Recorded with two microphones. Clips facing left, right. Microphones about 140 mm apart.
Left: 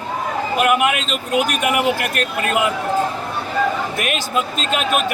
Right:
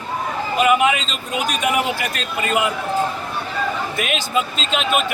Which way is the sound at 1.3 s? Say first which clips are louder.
Left 2 dB; 60° left (ahead or behind).